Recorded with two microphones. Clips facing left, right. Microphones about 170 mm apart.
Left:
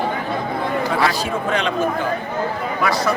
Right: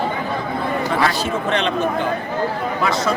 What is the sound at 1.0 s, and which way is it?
Speech, 5° left (ahead or behind).